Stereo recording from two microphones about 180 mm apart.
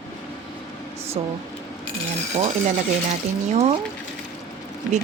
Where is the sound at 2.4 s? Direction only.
40° right (ahead or behind).